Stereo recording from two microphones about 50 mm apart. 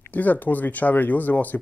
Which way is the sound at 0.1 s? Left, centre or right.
Left.